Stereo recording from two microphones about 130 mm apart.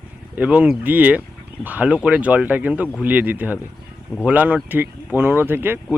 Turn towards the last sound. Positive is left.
turn(degrees=-15)  # may be behind; listen again after turning